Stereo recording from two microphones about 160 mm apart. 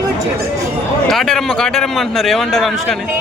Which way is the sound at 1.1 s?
Centre (ahead or behind).